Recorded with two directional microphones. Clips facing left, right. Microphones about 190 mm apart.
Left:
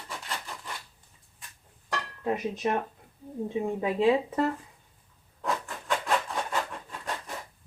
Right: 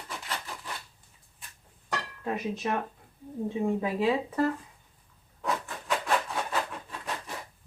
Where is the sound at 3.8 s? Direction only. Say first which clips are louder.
Left 3 dB; 25° left (ahead or behind).